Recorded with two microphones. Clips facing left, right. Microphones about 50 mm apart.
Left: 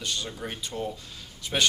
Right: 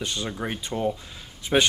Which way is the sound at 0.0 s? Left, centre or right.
Right.